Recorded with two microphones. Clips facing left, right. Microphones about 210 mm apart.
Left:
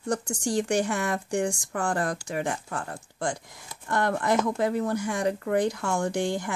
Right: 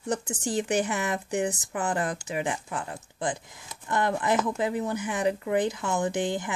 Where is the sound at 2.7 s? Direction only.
20° right (ahead or behind).